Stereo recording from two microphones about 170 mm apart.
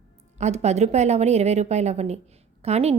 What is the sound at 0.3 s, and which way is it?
A woman's voice, 40° right (ahead or behind).